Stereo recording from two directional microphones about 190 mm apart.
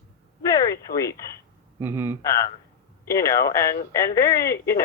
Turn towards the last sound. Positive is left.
turn(degrees=15)  # may be behind; listen again after turning